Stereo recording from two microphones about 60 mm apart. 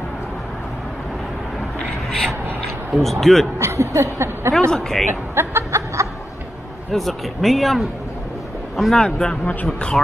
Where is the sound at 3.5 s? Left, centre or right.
Right.